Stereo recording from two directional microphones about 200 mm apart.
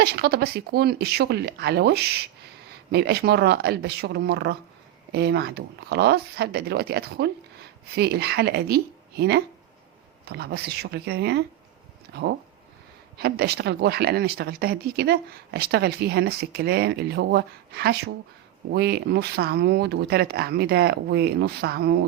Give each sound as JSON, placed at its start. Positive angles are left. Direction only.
{"t": 0.0, "sound": "speech", "side_deg": -55}
{"t": 13.1, "sound": "speech", "side_deg": -55}